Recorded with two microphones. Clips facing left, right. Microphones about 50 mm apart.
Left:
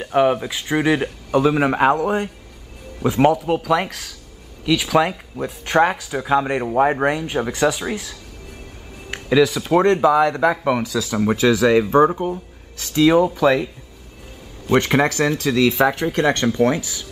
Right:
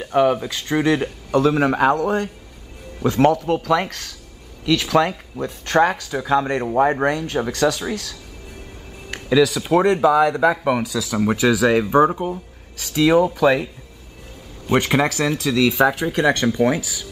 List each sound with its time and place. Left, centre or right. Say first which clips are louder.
0.0 s speech: even; centre
9.1 s music: even; centre
9.6 s speech: left 1 dB; centre
14.8 s speech: left 1 dB; centre
15.4 s speech: even; left
15.8 s speech: even; centre